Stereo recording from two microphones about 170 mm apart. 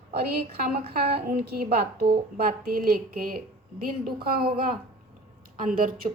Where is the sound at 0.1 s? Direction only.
65° right (ahead or behind).